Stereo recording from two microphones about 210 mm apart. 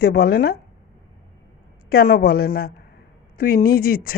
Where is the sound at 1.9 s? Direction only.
45° left (ahead or behind).